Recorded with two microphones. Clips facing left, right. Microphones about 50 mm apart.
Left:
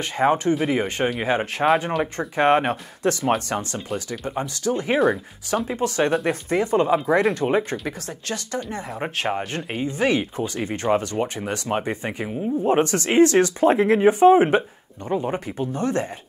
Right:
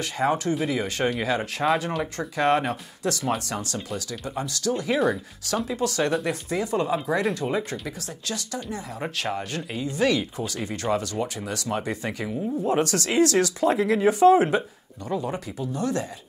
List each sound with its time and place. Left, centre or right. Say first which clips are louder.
0.0 s speech: left 4 dB; left